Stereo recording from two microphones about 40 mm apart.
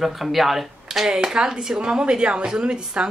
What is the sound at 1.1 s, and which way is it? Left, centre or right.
A woman's voice, centre.